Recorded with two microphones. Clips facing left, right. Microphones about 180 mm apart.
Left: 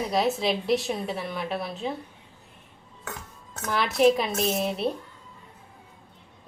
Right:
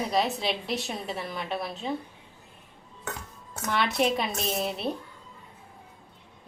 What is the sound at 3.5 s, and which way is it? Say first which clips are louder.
A woman's voice: even; 5° right (ahead or behind).